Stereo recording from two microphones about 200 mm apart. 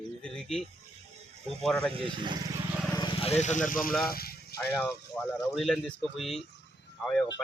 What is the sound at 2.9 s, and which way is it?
Speech, 25° left (ahead or behind).